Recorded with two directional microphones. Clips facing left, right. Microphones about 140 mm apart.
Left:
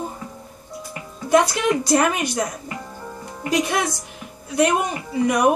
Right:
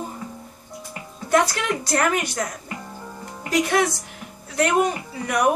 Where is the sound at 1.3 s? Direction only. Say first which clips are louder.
Left 3 dB; 15° left (ahead or behind).